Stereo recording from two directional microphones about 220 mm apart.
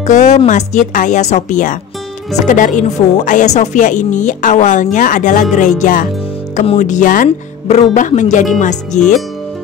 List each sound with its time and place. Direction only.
0.0 s speech: 35° left (ahead or behind)